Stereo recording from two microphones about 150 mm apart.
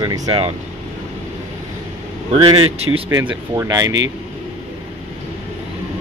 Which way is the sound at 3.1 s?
25° right (ahead or behind).